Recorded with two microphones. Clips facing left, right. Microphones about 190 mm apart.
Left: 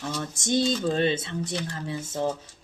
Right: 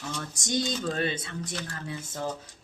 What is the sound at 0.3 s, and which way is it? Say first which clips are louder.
Speech: left 5 dB; 25° left (ahead or behind).